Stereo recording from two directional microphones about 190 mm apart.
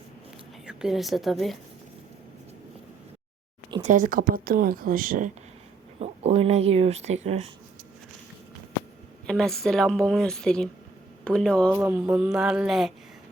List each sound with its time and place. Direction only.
0.6 s a woman's voice: 5° right (ahead or behind)
3.8 s speech: 45° right (ahead or behind)
6.0 s speech: 35° right (ahead or behind)
9.2 s a woman's voice: 5° left (ahead or behind)
11.7 s a woman's voice: 10° right (ahead or behind)